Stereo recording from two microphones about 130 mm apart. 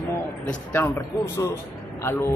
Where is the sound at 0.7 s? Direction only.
20° left (ahead or behind).